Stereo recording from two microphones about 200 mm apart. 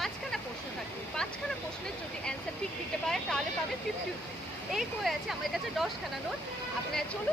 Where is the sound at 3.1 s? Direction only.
Centre (ahead or behind).